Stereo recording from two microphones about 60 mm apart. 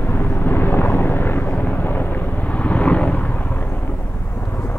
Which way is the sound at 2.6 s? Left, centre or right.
Left.